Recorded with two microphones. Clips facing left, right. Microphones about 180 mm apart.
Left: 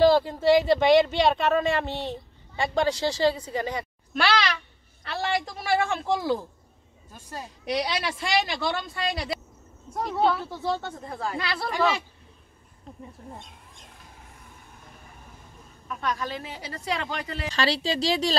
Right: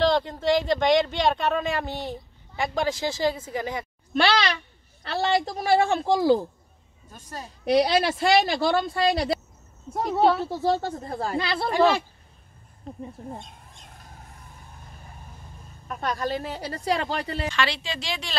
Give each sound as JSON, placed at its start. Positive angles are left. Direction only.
{"t": 0.0, "sound": "speech", "side_deg": 5}
{"t": 2.8, "sound": "a woman's voice", "side_deg": -15}
{"t": 7.6, "sound": "speech", "side_deg": -35}
{"t": 15.9, "sound": "speech", "side_deg": -40}
{"t": 17.5, "sound": "a woman's voice", "side_deg": 35}